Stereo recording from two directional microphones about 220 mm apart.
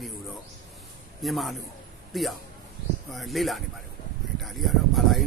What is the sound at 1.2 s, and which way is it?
Speech, centre (ahead or behind).